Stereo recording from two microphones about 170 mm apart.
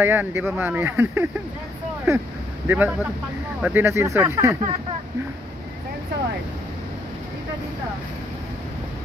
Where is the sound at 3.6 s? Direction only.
15° right (ahead or behind).